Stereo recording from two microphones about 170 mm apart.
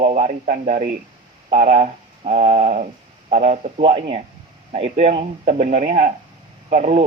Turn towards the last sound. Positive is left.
turn(degrees=-40)  # may be behind; listen again after turning